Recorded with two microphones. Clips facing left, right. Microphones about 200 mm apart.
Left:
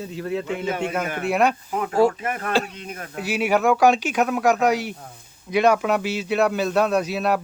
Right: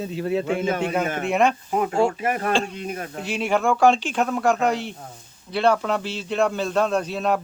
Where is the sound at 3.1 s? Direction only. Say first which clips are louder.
Left 3 dB; 5° left (ahead or behind).